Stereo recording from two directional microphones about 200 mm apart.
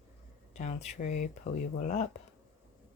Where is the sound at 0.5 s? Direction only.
35° left (ahead or behind).